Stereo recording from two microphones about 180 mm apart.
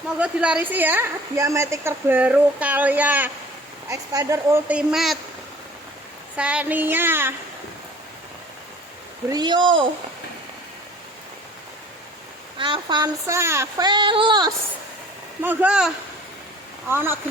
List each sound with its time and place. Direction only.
0.2 s a woman's voice: 5° right (ahead or behind)
6.3 s a woman's voice: 5° right (ahead or behind)
9.3 s child singing: 25° right (ahead or behind)
12.5 s child singing: 25° right (ahead or behind)
15.4 s a woman's voice: 10° right (ahead or behind)
16.9 s a woman's voice: 10° right (ahead or behind)